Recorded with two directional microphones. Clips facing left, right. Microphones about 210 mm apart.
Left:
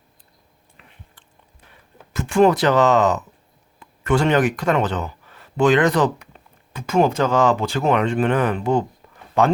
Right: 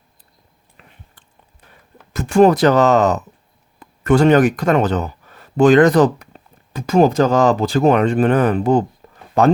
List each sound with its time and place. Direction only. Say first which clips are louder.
0.8 s biting: right 3 dB; 40° right (ahead or behind)
2.1 s speech: right 4 dB; 40° right (ahead or behind)
9.0 s a sound: right 4 dB; 40° right (ahead or behind)